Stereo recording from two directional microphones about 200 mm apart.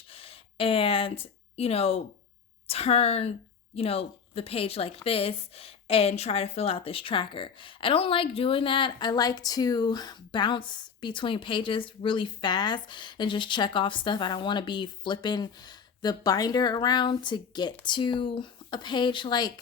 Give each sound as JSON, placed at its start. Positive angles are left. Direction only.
{"t": 0.1, "sound": "a woman's voice", "side_deg": 30}